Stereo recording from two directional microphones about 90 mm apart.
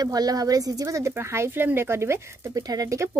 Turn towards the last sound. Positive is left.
turn(degrees=-40)  # may be behind; listen again after turning